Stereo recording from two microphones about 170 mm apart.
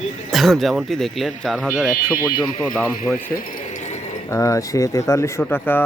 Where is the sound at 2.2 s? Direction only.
25° left (ahead or behind).